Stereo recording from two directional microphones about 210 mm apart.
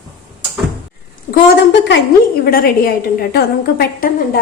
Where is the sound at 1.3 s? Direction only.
55° left (ahead or behind).